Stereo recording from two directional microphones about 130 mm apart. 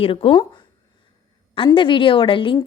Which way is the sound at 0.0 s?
45° left (ahead or behind).